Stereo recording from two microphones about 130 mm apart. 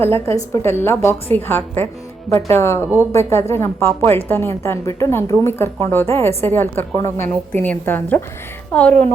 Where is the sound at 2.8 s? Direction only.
15° right (ahead or behind).